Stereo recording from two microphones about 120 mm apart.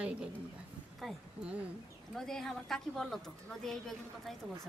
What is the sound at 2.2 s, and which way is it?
A woman's voice, 5° left (ahead or behind).